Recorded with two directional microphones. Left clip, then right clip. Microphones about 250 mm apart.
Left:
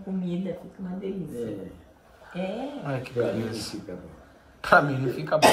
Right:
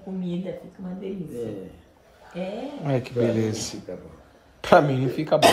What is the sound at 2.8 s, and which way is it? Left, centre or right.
Speech, right.